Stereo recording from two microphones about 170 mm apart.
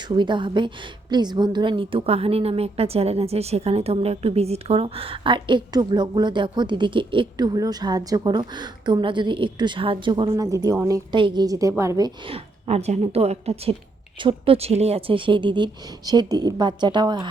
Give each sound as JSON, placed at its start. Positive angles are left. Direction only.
{"t": 0.0, "sound": "a woman's voice", "side_deg": -30}